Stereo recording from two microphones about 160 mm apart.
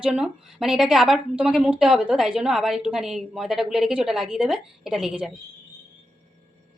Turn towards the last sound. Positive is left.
turn(degrees=-5)  # may be behind; listen again after turning